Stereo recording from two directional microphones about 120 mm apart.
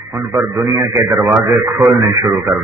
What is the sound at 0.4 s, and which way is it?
A man's voice, 20° right (ahead or behind).